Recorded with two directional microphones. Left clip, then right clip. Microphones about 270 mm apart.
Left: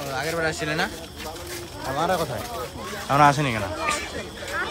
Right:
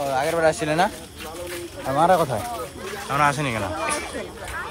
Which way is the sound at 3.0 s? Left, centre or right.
Centre.